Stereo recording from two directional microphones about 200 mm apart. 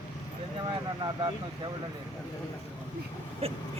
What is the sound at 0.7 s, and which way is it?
Speech, 20° right (ahead or behind).